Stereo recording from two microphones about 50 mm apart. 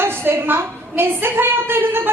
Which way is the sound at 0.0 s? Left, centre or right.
Right.